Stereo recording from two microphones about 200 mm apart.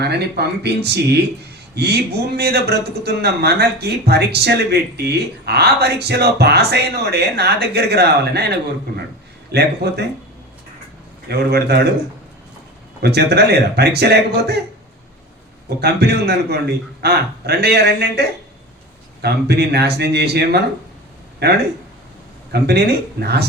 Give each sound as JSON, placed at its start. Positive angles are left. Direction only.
{"t": 0.0, "sound": "speech", "side_deg": -55}
{"t": 11.3, "sound": "a man's voice", "side_deg": -55}
{"t": 13.0, "sound": "speech", "side_deg": -55}
{"t": 15.8, "sound": "a man's voice", "side_deg": -55}